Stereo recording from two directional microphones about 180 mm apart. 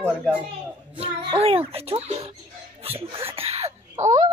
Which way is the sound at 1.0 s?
30° right (ahead or behind).